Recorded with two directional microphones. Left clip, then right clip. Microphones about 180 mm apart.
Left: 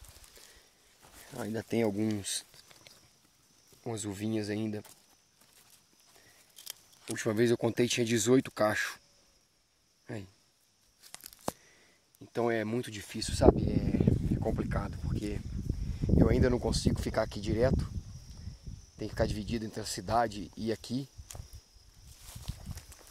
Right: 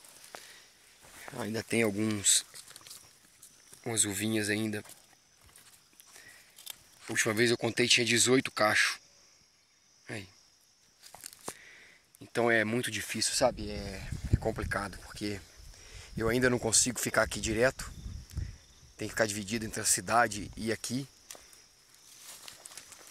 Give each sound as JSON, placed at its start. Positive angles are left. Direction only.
{"t": 1.0, "sound": "a sound", "side_deg": -5}
{"t": 1.5, "sound": "speech", "side_deg": 10}
{"t": 3.8, "sound": "speech", "side_deg": 10}
{"t": 7.0, "sound": "speech", "side_deg": 25}
{"t": 10.0, "sound": "speech", "side_deg": 35}
{"t": 11.2, "sound": "a sound", "side_deg": 20}
{"t": 12.2, "sound": "speech", "side_deg": 5}
{"t": 18.4, "sound": "cricket", "side_deg": 0}
{"t": 18.9, "sound": "speech", "side_deg": 10}
{"t": 21.3, "sound": "a sound", "side_deg": -10}
{"t": 22.3, "sound": "clip-clop", "side_deg": -5}